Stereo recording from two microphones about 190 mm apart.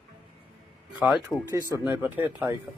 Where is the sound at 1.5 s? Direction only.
20° right (ahead or behind).